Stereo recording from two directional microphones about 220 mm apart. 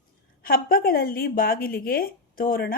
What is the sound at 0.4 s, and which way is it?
A woman's voice, 40° left (ahead or behind).